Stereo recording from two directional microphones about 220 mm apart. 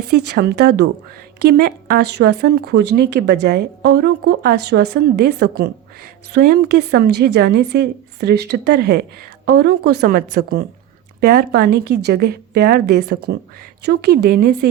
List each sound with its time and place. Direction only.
0.3 s speech: 45° right (ahead or behind)